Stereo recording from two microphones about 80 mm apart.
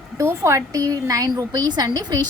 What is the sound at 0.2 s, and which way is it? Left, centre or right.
A woman's voice, right.